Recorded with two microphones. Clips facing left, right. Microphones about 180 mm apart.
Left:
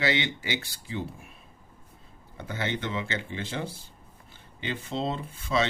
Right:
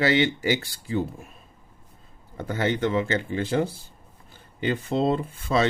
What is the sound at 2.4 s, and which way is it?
Speech, 45° right (ahead or behind).